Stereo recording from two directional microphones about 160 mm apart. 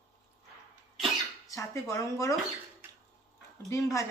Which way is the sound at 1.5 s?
20° left (ahead or behind).